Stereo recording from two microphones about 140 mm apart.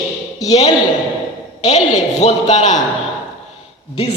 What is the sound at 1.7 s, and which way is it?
Speech, 55° left (ahead or behind).